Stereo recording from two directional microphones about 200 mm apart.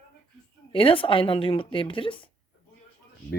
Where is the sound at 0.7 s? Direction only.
25° left (ahead or behind).